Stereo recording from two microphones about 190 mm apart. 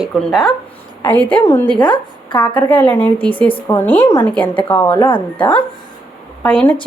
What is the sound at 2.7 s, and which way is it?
A woman's voice, 10° left (ahead or behind).